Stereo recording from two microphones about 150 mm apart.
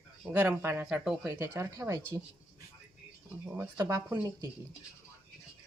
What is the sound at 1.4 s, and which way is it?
Speech, 15° right (ahead or behind).